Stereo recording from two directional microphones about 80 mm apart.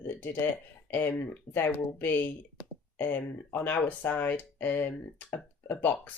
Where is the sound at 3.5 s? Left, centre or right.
Left.